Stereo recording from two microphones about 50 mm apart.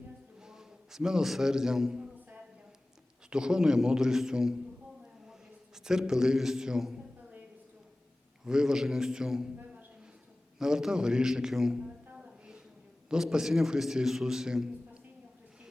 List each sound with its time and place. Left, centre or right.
0.3 s a man's voice: centre
3.2 s a man's voice: centre
8.4 s a man's voice: centre
10.6 s a man's voice: centre
12.1 s a sound: centre
13.1 s a man's voice: centre